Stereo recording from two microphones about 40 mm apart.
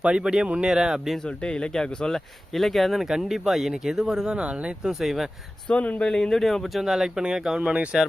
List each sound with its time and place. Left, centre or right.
0.0 s speech: right
1.2 s speech: left
3.0 s speech: centre
4.4 s speech: right
4.8 s speech: centre
5.6 s speech: left
6.0 s speech: left
6.3 s speech: centre
6.8 s speech: centre